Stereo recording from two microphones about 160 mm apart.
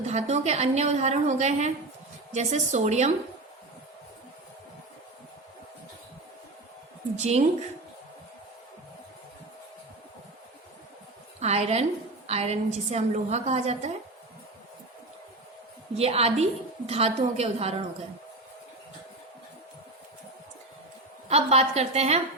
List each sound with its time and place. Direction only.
0.0 s a woman's voice: 45° right (ahead or behind)
7.2 s a woman's voice: 45° right (ahead or behind)
11.3 s a woman's voice: 40° right (ahead or behind)
16.0 s a woman's voice: 40° right (ahead or behind)
21.2 s a woman's voice: 40° right (ahead or behind)